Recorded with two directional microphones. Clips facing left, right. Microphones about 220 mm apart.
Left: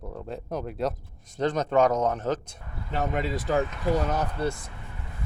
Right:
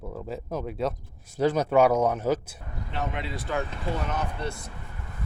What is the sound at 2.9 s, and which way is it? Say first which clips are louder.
Speech: left 5 dB; 45° left (ahead or behind).